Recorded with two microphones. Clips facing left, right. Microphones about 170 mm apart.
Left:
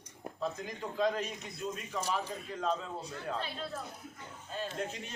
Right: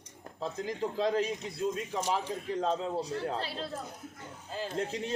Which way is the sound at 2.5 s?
30° right (ahead or behind).